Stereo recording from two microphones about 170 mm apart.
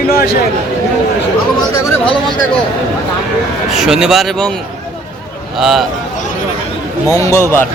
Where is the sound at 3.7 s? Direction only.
5° right (ahead or behind).